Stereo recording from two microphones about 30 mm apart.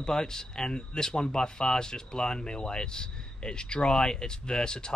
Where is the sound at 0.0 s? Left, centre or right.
Left.